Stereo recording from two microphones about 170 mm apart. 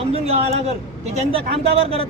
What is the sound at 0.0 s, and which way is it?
A man's voice, 35° right (ahead or behind).